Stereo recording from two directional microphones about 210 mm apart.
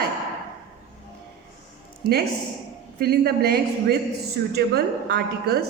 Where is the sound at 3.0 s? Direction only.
50° right (ahead or behind).